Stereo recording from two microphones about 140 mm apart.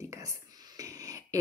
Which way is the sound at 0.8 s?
25° right (ahead or behind).